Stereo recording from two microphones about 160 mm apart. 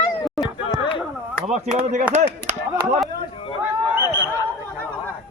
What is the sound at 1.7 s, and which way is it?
Speech, 50° right (ahead or behind).